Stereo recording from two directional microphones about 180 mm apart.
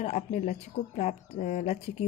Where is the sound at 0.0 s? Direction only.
40° left (ahead or behind).